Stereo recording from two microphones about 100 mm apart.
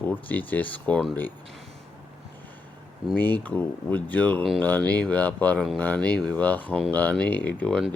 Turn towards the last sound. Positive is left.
turn(degrees=15)  # may be behind; listen again after turning